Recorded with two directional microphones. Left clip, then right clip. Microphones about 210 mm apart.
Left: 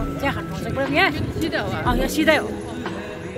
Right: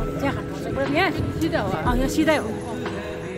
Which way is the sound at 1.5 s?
45° right (ahead or behind).